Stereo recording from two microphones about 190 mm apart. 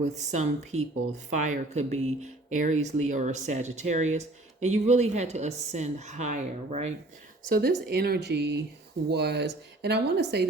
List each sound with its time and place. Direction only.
0.0 s speech: 35° right (ahead or behind)
7.4 s speech: 55° right (ahead or behind)